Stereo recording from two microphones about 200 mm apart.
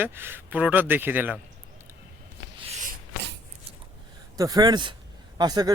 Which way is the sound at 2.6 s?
35° right (ahead or behind).